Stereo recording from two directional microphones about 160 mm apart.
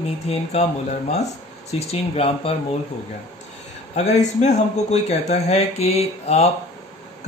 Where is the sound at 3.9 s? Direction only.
45° left (ahead or behind).